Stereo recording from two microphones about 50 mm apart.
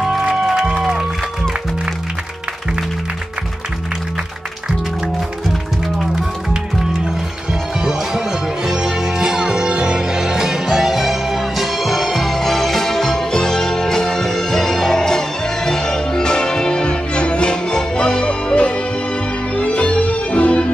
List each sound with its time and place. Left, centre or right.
0.0 s music: centre
7.8 s music: centre; by 20.6 s left